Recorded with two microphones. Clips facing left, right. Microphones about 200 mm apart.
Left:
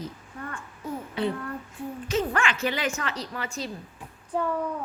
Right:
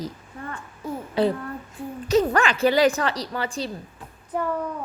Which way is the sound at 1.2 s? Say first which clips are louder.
Right 7 dB; 35° right (ahead or behind).